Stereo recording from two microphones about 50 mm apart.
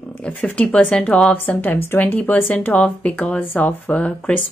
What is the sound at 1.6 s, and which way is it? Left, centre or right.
A woman's voice, left.